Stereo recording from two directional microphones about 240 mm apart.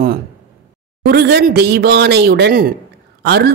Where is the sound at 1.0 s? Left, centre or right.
Right.